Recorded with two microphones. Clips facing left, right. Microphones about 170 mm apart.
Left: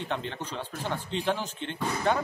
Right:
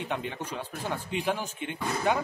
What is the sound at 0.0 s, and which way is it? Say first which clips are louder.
Speech: even; 10° right (ahead or behind).